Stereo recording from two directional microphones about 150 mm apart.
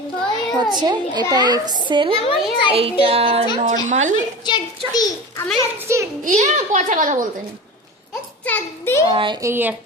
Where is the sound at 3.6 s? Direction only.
55° right (ahead or behind).